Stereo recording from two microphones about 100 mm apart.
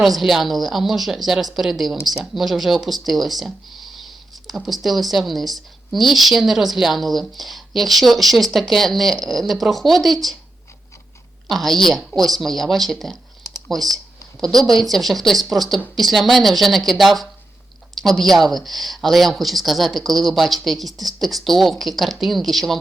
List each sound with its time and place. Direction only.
0.0 s speech: centre (ahead or behind)
11.4 s speech: centre (ahead or behind)